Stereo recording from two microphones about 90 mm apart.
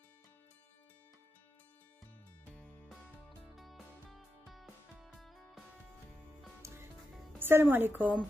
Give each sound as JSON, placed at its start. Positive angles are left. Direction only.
{"t": 2.5, "sound": "music", "side_deg": 15}
{"t": 3.4, "sound": "music", "side_deg": 0}
{"t": 7.3, "sound": "a woman's voice", "side_deg": -25}